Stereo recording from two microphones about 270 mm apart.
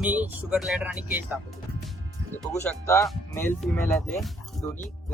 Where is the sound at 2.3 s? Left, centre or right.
Centre.